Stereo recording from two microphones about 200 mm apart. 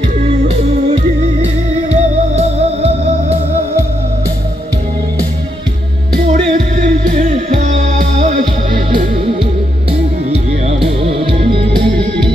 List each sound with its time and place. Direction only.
1.9 s music: 30° right (ahead or behind)
6.3 s music: 35° right (ahead or behind)